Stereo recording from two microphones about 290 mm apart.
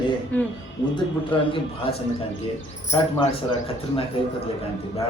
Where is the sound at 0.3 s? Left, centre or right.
Centre.